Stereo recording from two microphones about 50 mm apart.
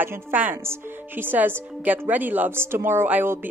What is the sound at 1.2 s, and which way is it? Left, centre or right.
A woman's voice, right.